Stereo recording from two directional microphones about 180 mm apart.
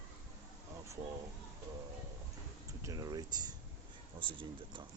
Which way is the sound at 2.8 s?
20° right (ahead or behind).